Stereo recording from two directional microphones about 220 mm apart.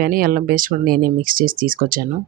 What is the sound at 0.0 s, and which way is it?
Speech, 40° right (ahead or behind).